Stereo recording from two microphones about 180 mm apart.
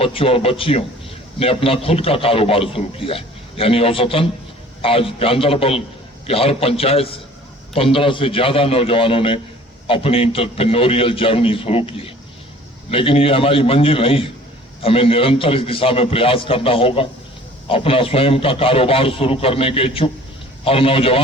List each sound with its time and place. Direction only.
0.0 s a man's voice: 30° left (ahead or behind)